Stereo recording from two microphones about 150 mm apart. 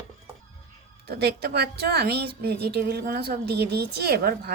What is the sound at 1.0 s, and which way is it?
A woman's voice, 90° right.